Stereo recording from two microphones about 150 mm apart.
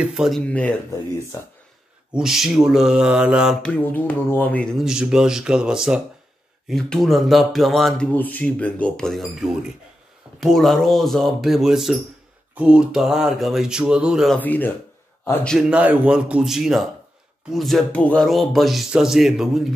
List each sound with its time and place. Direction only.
0.0 s speech: 5° right (ahead or behind)
2.1 s speech: 5° right (ahead or behind)
3.6 s speech: 10° left (ahead or behind)
4.7 s speech: 5° right (ahead or behind)
8.1 s speech: 10° left (ahead or behind)
14.4 s speech: 10° left (ahead or behind)
15.7 s speech: 10° right (ahead or behind)